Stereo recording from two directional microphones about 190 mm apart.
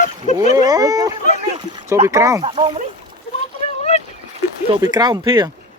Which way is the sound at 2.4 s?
30° right (ahead or behind).